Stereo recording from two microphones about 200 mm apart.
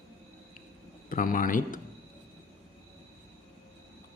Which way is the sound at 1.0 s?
45° left (ahead or behind).